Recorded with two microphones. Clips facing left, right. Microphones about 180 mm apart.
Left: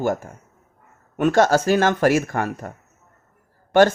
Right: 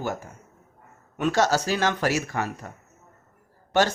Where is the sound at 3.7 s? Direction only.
55° left (ahead or behind).